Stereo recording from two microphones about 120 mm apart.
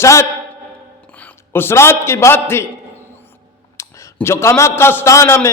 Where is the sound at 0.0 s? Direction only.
25° left (ahead or behind).